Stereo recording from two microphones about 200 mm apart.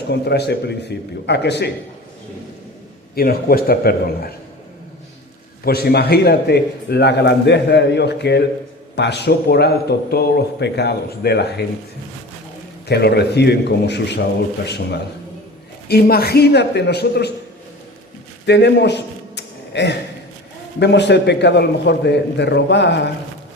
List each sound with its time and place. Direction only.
0.1 s a man's voice: 55° left (ahead or behind)
3.2 s a man's voice: 50° left (ahead or behind)
5.6 s a man's voice: 50° left (ahead or behind)
12.9 s a man's voice: 55° left (ahead or behind)
18.4 s a sound: 60° left (ahead or behind)
20.7 s a man's voice: 60° left (ahead or behind)